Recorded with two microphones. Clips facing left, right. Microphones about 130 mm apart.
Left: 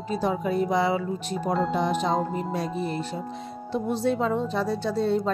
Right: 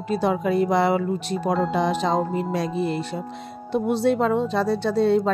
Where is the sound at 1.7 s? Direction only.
90° right.